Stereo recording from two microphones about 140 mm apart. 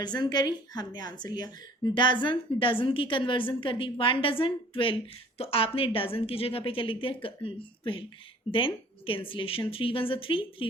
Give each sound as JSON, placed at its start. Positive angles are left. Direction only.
{"t": 0.0, "sound": "a woman's voice", "side_deg": 30}